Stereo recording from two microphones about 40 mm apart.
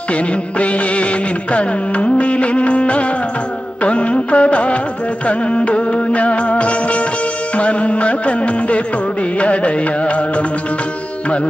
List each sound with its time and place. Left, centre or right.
0.1 s music of bollywood: left
3.8 s music: left